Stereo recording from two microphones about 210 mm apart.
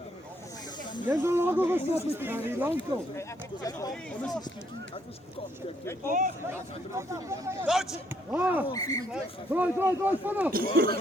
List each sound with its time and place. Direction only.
1.0 s speech: 10° right (ahead or behind)
3.2 s speech: 15° left (ahead or behind)
6.1 s speech: 40° right (ahead or behind)
6.5 s speech: 15° right (ahead or behind)
8.6 s speech: 15° left (ahead or behind)
9.1 s speech: 10° right (ahead or behind)
10.5 s speech: 45° right (ahead or behind)